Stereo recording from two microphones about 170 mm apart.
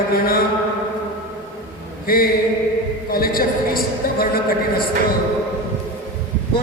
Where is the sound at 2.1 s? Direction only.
60° left (ahead or behind).